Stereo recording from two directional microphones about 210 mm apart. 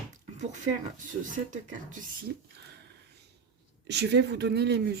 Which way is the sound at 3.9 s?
50° right (ahead or behind).